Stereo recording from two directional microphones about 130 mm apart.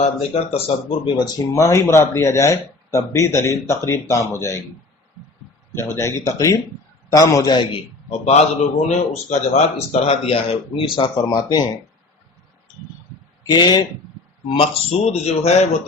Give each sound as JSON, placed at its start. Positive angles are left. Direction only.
{"t": 0.0, "sound": "speech", "side_deg": 55}
{"t": 1.2, "sound": "speech", "side_deg": 25}
{"t": 5.7, "sound": "speech", "side_deg": 20}
{"t": 8.2, "sound": "speech", "side_deg": 55}
{"t": 9.9, "sound": "speech", "side_deg": 55}
{"t": 10.8, "sound": "speech", "side_deg": 40}
{"t": 13.5, "sound": "speech", "side_deg": 35}
{"t": 14.5, "sound": "speech", "side_deg": 50}